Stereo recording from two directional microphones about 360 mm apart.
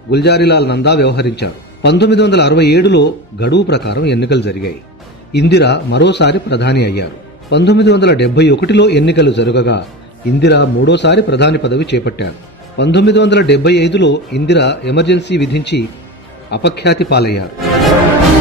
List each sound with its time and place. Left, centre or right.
0.1 s a man's voice: left